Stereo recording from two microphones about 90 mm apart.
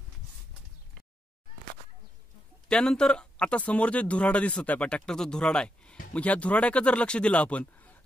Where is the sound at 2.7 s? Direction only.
10° left (ahead or behind).